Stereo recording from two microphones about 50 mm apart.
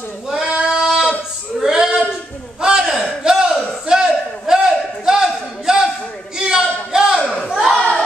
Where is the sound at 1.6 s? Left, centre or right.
Centre.